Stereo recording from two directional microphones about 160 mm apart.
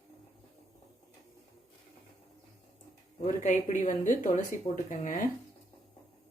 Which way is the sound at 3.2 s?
50° left (ahead or behind).